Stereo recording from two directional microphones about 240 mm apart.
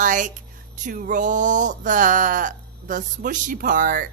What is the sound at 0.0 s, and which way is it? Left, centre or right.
Music, right.